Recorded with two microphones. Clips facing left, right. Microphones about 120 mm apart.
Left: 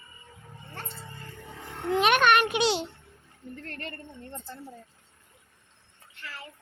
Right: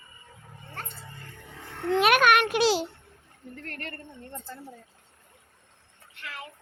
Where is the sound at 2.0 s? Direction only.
5° right (ahead or behind).